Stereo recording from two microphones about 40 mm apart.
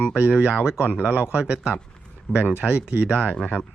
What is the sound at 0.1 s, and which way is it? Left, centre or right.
Speech, right.